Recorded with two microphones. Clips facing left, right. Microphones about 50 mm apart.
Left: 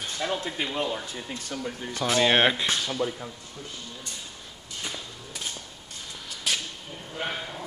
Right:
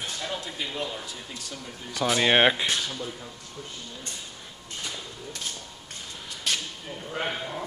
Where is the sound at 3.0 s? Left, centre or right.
Left.